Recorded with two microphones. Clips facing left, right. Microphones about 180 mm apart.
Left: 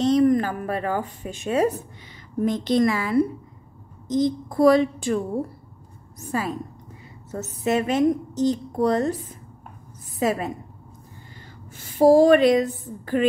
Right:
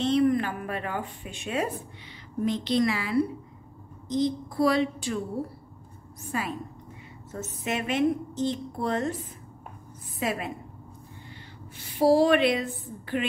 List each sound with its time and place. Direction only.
0.0 s a woman's voice: 40° left (ahead or behind)
6.3 s a woman's voice: 40° left (ahead or behind)
10.1 s a woman's voice: 40° left (ahead or behind)
11.7 s a sound: 45° left (ahead or behind)
13.0 s a woman's voice: 40° left (ahead or behind)